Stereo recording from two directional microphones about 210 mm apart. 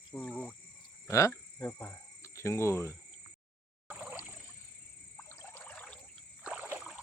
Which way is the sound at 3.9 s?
10° right (ahead or behind).